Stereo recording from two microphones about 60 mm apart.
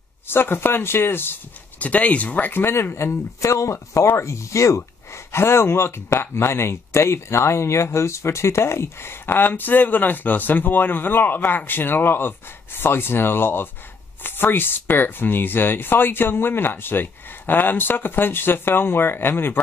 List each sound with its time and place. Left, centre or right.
0.3 s speech: left
1.8 s speech: left